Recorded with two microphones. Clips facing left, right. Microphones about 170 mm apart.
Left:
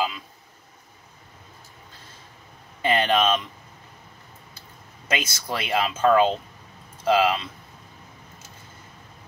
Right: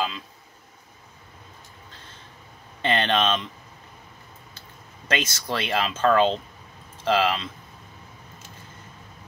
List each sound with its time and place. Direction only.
2.8 s speech: 10° left (ahead or behind)
5.0 s speech: 10° left (ahead or behind)